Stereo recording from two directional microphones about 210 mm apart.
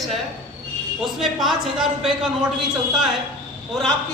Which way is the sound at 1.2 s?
Centre (ahead or behind).